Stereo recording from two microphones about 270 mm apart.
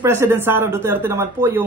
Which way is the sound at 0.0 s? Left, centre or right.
Centre.